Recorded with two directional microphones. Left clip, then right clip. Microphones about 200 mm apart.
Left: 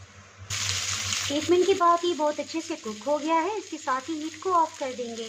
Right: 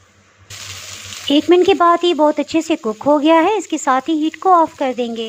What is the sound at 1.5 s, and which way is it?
Speech, 40° right (ahead or behind).